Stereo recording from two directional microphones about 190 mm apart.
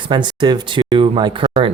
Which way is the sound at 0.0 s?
25° right (ahead or behind).